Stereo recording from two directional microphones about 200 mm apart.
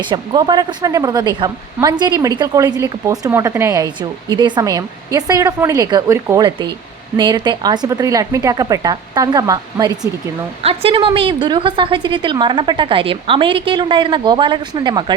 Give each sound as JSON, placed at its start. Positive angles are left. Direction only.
{"t": 0.0, "sound": "a woman's voice", "side_deg": -25}